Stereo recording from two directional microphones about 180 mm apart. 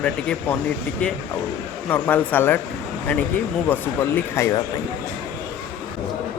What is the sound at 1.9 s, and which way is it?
Speech, 10° left (ahead or behind).